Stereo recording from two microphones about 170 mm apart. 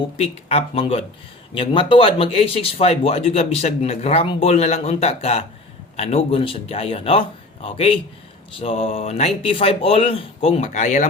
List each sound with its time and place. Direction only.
0.0 s speech: 35° left (ahead or behind)